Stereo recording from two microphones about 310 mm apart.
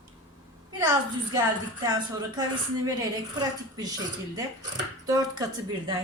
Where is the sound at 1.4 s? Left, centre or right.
Centre.